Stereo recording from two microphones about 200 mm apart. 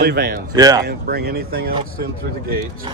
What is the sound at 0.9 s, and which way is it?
Speech, 50° right (ahead or behind).